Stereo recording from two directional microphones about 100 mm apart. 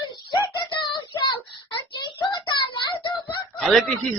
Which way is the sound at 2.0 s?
50° left (ahead or behind).